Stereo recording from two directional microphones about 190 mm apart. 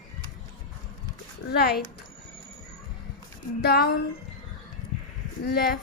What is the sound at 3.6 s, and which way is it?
Speech, 55° left (ahead or behind).